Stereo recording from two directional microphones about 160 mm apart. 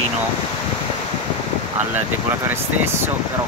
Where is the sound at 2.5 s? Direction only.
15° right (ahead or behind).